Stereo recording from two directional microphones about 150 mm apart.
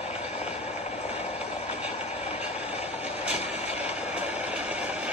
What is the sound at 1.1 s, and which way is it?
Vehicle, 45° left (ahead or behind).